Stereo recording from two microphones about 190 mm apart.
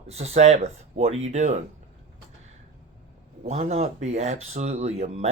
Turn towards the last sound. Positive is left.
turn(degrees=-35)  # may be behind; listen again after turning